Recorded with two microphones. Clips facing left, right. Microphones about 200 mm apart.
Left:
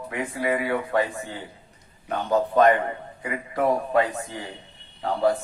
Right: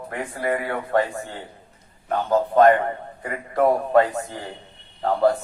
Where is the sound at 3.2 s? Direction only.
50° right (ahead or behind).